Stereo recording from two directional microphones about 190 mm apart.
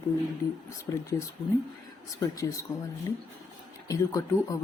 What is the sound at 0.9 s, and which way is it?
Speech, 15° left (ahead or behind).